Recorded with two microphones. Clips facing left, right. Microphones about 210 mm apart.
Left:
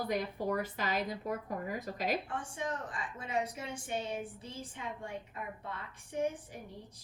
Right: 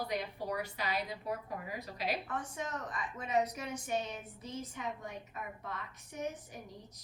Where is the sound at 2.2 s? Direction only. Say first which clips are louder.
Left 2 dB; 30° left (ahead or behind).